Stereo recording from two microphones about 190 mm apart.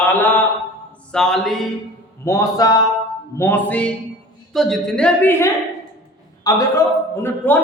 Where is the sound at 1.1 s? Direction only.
5° left (ahead or behind).